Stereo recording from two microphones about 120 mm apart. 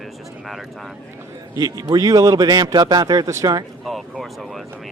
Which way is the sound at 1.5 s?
30° right (ahead or behind).